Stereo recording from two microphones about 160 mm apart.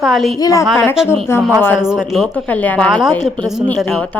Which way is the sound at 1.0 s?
5° right (ahead or behind).